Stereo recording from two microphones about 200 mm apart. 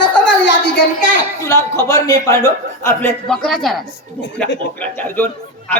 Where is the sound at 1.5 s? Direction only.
15° left (ahead or behind).